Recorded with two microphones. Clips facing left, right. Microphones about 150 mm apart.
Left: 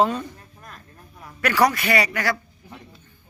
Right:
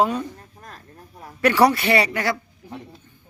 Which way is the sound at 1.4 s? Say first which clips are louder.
Right 3 dB; 25° right (ahead or behind).